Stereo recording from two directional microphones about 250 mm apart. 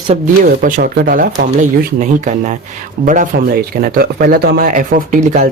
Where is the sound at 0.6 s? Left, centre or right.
Right.